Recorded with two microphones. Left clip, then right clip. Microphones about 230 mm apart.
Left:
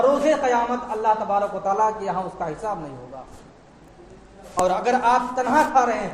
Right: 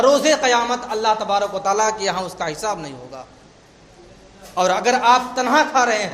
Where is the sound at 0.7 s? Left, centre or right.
Right.